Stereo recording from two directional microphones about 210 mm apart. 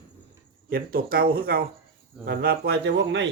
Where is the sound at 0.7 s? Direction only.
45° right (ahead or behind).